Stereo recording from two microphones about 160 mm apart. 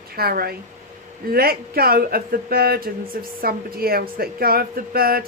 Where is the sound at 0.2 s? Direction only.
70° right (ahead or behind).